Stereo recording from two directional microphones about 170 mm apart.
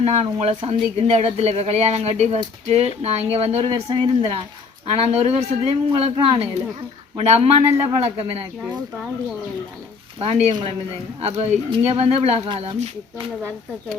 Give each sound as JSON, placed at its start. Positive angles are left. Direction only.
{"t": 0.0, "sound": "speech", "side_deg": -40}
{"t": 10.2, "sound": "speech", "side_deg": -35}